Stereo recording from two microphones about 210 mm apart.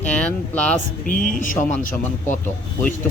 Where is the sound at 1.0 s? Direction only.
40° left (ahead or behind).